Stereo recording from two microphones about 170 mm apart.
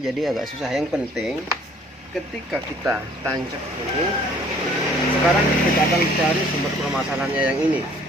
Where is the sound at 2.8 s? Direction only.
15° right (ahead or behind).